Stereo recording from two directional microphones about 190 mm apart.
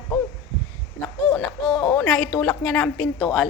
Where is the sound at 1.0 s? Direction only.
5° left (ahead or behind).